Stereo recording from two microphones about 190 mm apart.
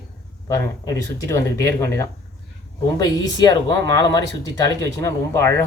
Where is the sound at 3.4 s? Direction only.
20° left (ahead or behind).